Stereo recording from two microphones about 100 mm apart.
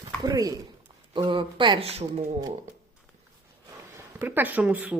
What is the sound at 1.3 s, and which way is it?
Speech, 55° right (ahead or behind).